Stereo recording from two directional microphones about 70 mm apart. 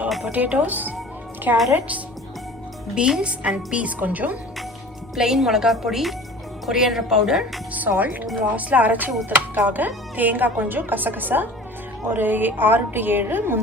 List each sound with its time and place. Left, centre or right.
0.3 s a woman's voice: right
2.9 s a woman's voice: centre
5.1 s a woman's voice: centre
7.7 s speech: right